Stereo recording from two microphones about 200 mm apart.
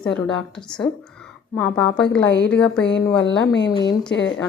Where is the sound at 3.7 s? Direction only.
20° left (ahead or behind).